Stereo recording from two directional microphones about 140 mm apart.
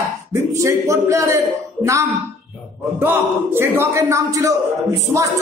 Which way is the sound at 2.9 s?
15° right (ahead or behind).